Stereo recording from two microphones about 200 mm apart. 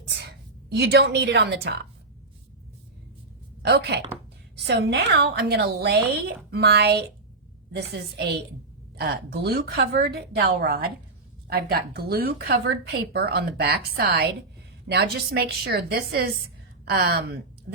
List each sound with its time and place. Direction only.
0.7 s a woman's voice: 55° right (ahead or behind)
3.6 s a woman's voice: 55° right (ahead or behind)
8.1 s a woman's voice: 55° right (ahead or behind)